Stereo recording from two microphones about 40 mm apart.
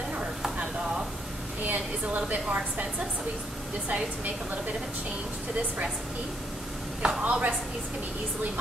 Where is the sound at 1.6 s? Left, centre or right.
Right.